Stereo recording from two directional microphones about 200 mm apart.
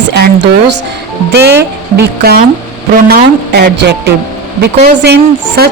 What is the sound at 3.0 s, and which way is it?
Speech, 50° right (ahead or behind).